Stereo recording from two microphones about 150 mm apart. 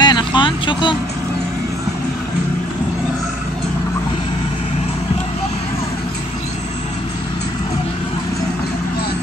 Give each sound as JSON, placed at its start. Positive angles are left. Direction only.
{"t": 0.0, "sound": "music", "side_deg": 30}